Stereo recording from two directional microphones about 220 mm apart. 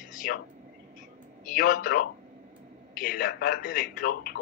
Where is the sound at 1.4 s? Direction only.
40° left (ahead or behind).